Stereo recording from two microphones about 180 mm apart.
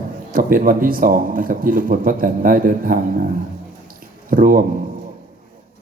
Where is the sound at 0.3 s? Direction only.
50° right (ahead or behind).